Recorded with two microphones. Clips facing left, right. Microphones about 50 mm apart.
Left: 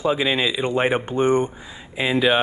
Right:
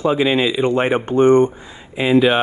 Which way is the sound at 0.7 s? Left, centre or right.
Centre.